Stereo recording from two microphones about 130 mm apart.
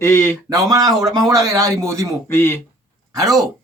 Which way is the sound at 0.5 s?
30° right (ahead or behind).